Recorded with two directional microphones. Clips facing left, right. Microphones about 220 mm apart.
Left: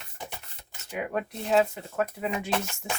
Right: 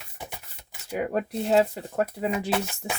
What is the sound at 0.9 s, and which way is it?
Speech, 35° right (ahead or behind).